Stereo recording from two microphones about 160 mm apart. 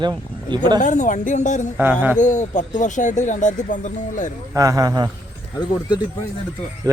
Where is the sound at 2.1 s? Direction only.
50° left (ahead or behind).